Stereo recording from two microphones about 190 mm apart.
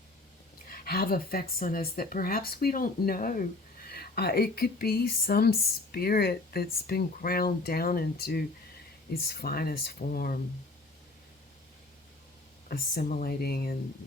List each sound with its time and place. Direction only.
0.7 s speech: 55° left (ahead or behind)
12.6 s speech: 55° left (ahead or behind)